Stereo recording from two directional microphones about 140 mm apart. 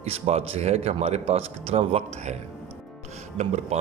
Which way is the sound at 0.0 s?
45° right (ahead or behind).